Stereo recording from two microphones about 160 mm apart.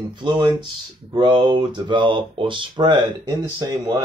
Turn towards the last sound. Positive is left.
turn(degrees=-20)  # may be behind; listen again after turning